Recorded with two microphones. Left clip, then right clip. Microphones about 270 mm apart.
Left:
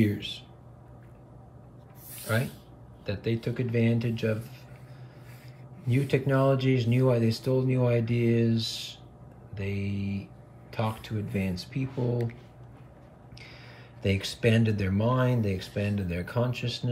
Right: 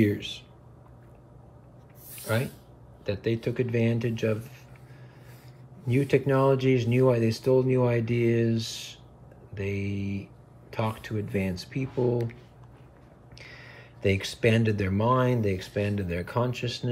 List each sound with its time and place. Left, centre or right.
0.0 s speech: centre
2.2 s speech: right
5.9 s speech: right
9.9 s speech: centre
10.7 s speech: centre
14.0 s speech: centre
15.7 s speech: right
16.1 s speech: centre